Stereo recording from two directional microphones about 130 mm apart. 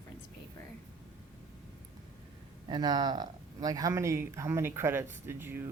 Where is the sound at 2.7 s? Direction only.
30° right (ahead or behind); by 5.6 s 15° right (ahead or behind).